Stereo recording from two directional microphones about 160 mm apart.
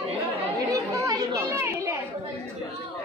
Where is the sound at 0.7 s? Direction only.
20° right (ahead or behind).